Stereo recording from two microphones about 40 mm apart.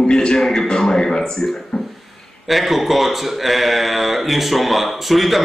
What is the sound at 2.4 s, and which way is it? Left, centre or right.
A man's voice, centre.